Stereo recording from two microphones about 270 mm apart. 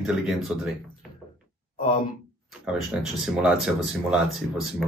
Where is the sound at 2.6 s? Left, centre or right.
Centre.